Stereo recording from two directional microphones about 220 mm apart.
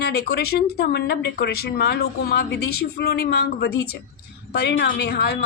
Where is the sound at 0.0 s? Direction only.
50° left (ahead or behind).